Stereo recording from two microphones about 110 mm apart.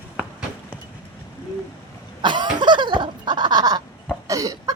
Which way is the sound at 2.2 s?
45° right (ahead or behind).